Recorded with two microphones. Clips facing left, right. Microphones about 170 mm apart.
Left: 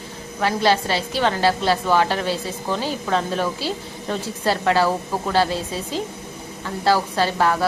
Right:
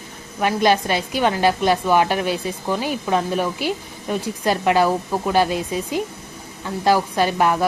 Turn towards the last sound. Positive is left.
turn(degrees=-15)  # may be behind; listen again after turning